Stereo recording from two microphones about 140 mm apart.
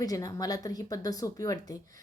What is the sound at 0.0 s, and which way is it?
A woman's voice, 25° left (ahead or behind).